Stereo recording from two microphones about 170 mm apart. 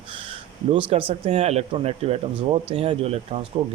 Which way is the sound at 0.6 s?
35° right (ahead or behind).